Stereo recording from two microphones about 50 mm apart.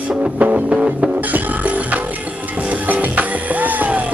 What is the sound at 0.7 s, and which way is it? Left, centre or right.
Music, right.